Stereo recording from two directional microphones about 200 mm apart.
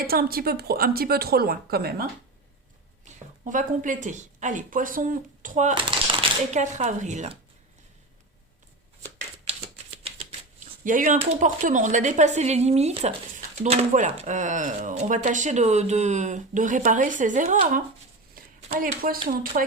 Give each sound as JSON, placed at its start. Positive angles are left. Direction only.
{"t": 0.1, "sound": "speech", "side_deg": -50}
{"t": 10.8, "sound": "speech", "side_deg": -40}
{"t": 18.3, "sound": "a sound", "side_deg": -40}
{"t": 19.3, "sound": "speech", "side_deg": -45}